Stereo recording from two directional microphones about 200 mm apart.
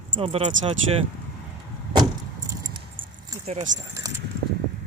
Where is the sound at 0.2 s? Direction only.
25° right (ahead or behind).